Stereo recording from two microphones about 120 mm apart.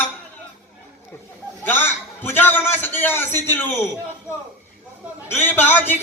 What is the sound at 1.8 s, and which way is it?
A man's voice, 20° left (ahead or behind).